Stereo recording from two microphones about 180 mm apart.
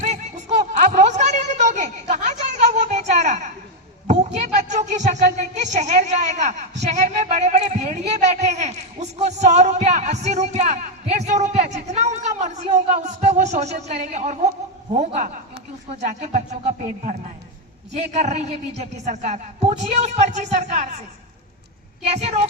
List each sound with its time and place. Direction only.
0.0 s a sound: 40° right (ahead or behind)
16.0 s a woman's voice: 40° right (ahead or behind)
22.0 s a woman's voice: 35° right (ahead or behind)